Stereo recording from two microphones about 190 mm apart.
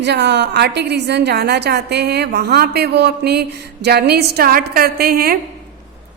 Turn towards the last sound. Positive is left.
turn(degrees=-55)  # may be behind; listen again after turning